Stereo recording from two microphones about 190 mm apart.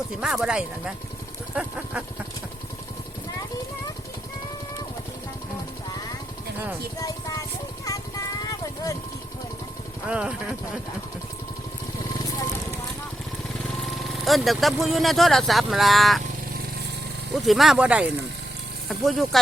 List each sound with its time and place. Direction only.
0.2 s speech: centre (ahead or behind)
1.5 s a sound: 5° right (ahead or behind)
7.0 s music: 20° left (ahead or behind)
10.1 s speech: 5° right (ahead or behind)
14.1 s speech: centre (ahead or behind)
17.3 s speech: centre (ahead or behind)